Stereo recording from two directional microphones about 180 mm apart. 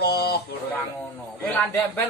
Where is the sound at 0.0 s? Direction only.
60° left (ahead or behind).